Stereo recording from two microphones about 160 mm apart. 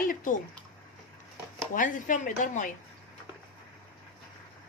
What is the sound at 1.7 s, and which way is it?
Speech, 55° left (ahead or behind).